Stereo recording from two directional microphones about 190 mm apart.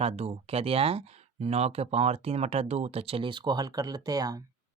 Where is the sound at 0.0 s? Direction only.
30° right (ahead or behind).